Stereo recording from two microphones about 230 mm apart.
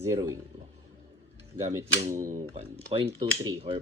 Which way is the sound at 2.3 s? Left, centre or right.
Right.